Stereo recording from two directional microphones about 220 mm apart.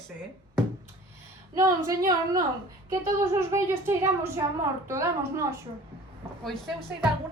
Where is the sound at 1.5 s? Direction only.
15° right (ahead or behind).